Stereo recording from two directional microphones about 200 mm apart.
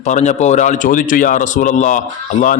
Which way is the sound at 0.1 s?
35° left (ahead or behind).